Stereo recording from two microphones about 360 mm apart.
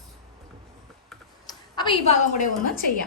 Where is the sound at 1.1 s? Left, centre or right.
Centre.